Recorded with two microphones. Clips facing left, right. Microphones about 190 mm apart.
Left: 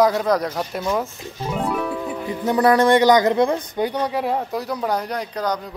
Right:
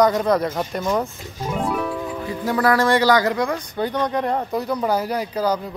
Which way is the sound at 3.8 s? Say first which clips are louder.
Right 1 dB; 10° left (ahead or behind).